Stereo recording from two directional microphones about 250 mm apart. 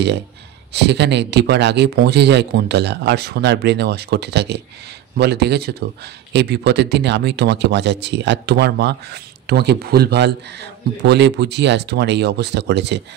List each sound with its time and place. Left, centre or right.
0.7 s speech: right